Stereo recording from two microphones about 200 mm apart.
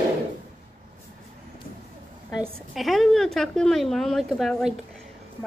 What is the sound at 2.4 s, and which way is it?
A woman's voice, centre (ahead or behind).